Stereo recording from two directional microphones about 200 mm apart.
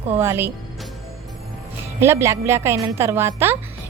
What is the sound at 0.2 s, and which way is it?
Speech, 10° right (ahead or behind).